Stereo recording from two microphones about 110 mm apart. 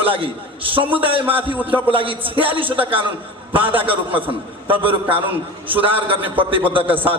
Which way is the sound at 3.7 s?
55° right (ahead or behind).